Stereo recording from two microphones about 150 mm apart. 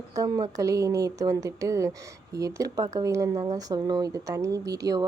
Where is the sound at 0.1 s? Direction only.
25° right (ahead or behind).